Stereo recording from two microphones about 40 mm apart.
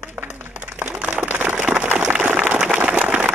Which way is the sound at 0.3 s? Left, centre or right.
Right.